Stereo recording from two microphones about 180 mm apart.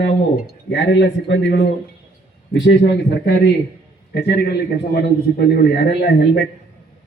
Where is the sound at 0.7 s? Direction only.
75° left (ahead or behind).